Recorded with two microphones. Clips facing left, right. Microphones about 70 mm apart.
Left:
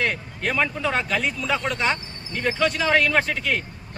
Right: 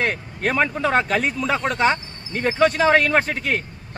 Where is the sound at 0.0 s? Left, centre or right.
Right.